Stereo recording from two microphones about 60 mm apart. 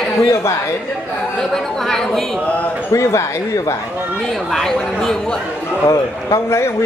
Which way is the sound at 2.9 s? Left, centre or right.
Left.